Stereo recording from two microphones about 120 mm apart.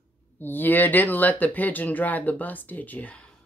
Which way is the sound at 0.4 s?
15° left (ahead or behind).